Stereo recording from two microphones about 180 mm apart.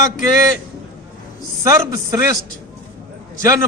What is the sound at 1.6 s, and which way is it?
Speech, 15° right (ahead or behind).